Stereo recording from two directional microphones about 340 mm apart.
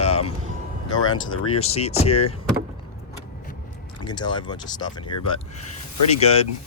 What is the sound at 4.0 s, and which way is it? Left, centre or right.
Speech, centre.